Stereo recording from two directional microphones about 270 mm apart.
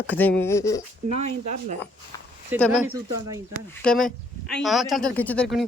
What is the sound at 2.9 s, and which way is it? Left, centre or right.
Speech, centre.